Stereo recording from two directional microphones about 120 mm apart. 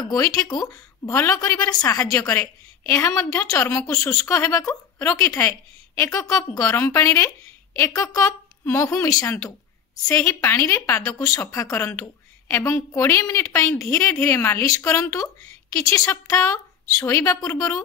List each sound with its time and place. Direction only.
0.0 s a woman's voice: 30° left (ahead or behind)